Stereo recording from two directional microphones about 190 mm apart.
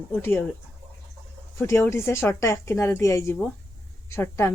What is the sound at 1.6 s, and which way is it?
Speech, 15° left (ahead or behind).